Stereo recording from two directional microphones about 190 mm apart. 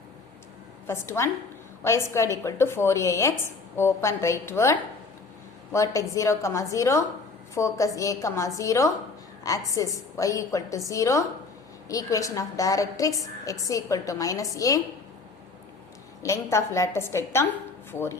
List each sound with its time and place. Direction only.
0.9 s a woman's voice: 15° left (ahead or behind)
16.2 s a woman's voice: 15° left (ahead or behind)